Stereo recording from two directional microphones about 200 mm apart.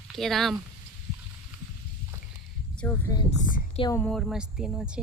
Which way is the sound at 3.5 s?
40° left (ahead or behind).